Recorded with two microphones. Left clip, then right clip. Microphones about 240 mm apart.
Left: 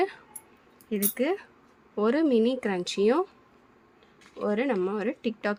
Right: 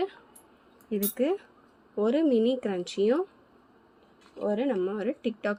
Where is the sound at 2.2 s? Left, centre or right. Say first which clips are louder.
Even; left.